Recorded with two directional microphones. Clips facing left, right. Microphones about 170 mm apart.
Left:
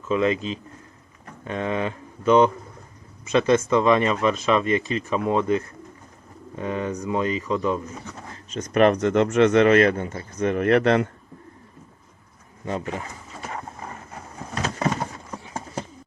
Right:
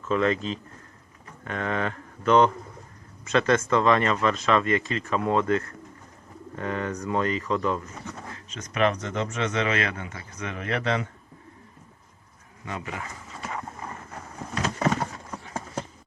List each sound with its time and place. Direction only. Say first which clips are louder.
0.1 s speech: left 2 dB; 15° left (ahead or behind)
8.5 s speech: left 7 dB; 50° left (ahead or behind)
12.6 s speech: left 6 dB; 35° left (ahead or behind)